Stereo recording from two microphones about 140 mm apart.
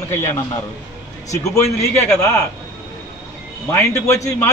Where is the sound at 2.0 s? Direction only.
15° left (ahead or behind).